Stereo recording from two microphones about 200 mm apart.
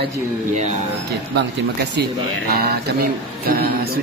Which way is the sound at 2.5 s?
50° right (ahead or behind).